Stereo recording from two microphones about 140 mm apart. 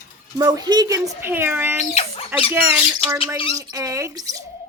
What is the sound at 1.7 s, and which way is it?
Speech, 50° left (ahead or behind).